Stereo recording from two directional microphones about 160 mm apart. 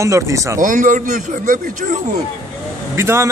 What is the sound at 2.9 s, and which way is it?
Speech, 15° right (ahead or behind).